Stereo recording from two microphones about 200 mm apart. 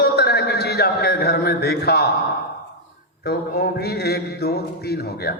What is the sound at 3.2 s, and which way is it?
A man's voice, 50° left (ahead or behind).